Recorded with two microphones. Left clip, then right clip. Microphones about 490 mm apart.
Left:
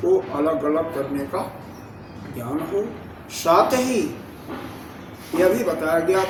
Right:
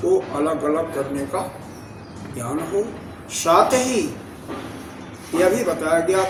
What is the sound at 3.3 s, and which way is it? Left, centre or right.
Speech, left.